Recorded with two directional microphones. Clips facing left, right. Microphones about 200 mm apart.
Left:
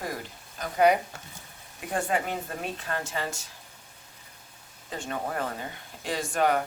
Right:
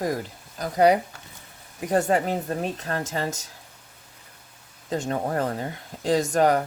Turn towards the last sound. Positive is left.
turn(degrees=-40)  # may be behind; listen again after turning